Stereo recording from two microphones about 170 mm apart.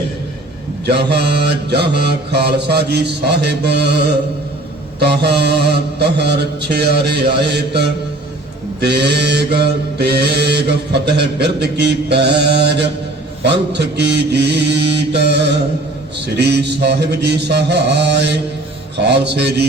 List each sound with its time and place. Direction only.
0.9 s mantra: 75° right (ahead or behind)